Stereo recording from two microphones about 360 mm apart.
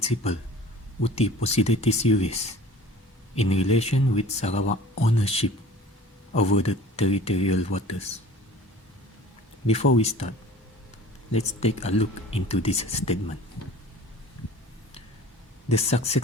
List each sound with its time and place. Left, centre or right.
0.0 s speech: centre
6.5 s speech: centre
9.6 s speech: centre
11.3 s speech: centre
15.7 s speech: centre